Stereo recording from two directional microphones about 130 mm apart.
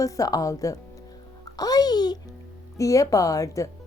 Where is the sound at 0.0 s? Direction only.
25° left (ahead or behind).